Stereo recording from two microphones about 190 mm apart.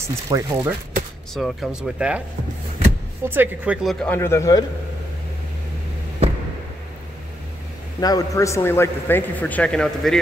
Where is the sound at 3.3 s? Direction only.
10° right (ahead or behind).